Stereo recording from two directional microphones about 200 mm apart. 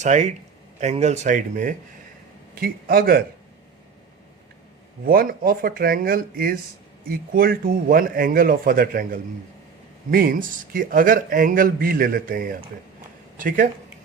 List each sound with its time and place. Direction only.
0.0 s speech: 35° right (ahead or behind)
5.0 s speech: 45° right (ahead or behind)